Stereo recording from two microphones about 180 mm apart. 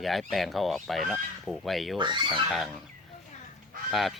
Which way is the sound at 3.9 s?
Centre (ahead or behind).